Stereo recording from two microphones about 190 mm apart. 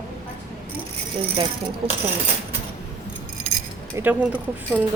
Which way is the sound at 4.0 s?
10° right (ahead or behind).